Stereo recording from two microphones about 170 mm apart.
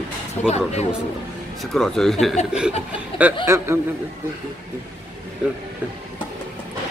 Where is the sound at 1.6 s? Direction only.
Centre (ahead or behind).